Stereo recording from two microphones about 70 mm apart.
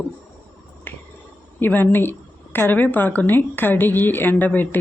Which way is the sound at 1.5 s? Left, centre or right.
Left.